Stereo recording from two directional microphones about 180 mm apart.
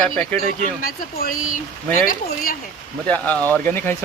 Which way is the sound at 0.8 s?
50° left (ahead or behind).